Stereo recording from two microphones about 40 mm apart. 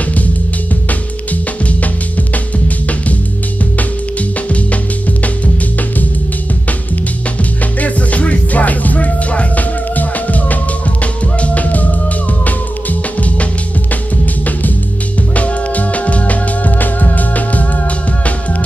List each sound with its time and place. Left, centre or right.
7.8 s music: left
15.3 s music: left